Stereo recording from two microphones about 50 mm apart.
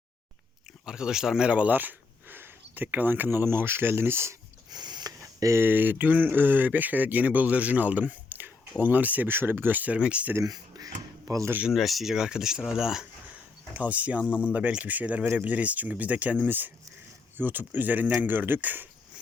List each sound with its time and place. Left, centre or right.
0.9 s speech: centre
1.5 s speech: right
5.2 s a sound: right
5.6 s speech: right
9.2 s speech: right
11.3 s speech: right
11.7 s speech: centre
13.7 s speech: right